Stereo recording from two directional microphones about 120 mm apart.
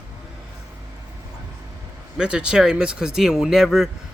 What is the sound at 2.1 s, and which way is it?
Speech, 10° right (ahead or behind).